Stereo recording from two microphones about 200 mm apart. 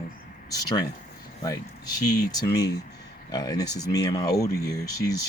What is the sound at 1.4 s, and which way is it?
Speech, 20° left (ahead or behind).